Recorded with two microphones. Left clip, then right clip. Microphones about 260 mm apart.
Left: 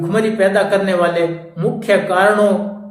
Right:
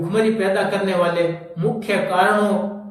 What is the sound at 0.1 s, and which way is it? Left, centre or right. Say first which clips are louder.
A man's voice: left 4 dB; centre.